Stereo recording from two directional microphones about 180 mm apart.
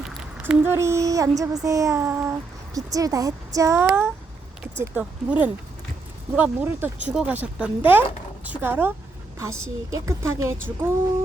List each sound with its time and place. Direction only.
0.0 s speech: 10° right (ahead or behind)